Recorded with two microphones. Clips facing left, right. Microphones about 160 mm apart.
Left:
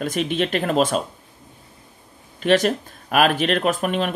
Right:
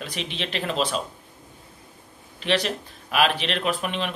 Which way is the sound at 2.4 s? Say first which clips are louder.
Left 7 dB; 50° left (ahead or behind).